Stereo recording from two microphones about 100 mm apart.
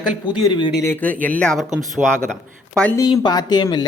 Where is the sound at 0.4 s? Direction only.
50° left (ahead or behind).